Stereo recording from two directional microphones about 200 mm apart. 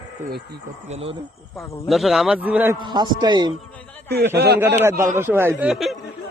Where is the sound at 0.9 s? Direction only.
30° right (ahead or behind).